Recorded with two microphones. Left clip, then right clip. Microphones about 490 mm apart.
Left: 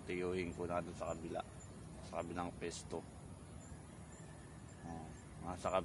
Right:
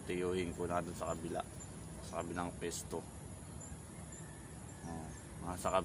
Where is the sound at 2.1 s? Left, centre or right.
Left.